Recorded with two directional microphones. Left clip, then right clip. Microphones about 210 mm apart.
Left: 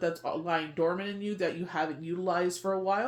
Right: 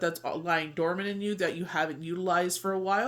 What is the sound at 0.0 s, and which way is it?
Speech, 30° right (ahead or behind).